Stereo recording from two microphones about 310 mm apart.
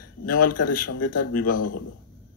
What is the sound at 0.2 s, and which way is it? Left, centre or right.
Speech, left.